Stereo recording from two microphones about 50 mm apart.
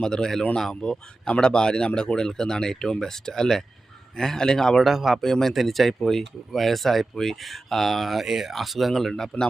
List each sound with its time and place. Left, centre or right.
0.0 s speech: centre
4.9 s speech: centre